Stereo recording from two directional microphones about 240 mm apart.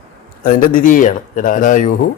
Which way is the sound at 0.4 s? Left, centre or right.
Left.